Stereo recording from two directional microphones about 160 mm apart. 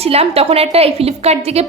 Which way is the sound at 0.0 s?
40° right (ahead or behind).